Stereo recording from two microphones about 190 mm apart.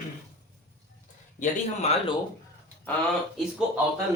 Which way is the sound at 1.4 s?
35° left (ahead or behind).